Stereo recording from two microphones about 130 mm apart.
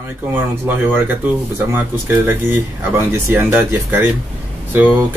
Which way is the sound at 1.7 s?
15° right (ahead or behind).